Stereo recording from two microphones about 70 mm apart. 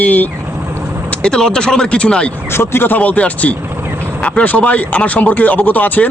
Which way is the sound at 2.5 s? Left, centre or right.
Left.